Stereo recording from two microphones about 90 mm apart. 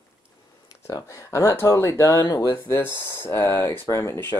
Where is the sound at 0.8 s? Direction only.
40° left (ahead or behind).